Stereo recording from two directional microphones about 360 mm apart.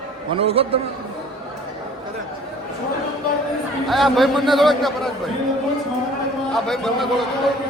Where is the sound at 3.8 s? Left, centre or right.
Centre.